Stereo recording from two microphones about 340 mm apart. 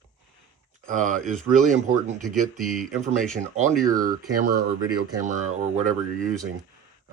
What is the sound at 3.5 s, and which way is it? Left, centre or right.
Speech, centre.